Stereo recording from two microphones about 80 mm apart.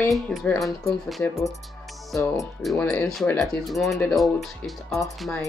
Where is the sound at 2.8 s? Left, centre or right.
Centre.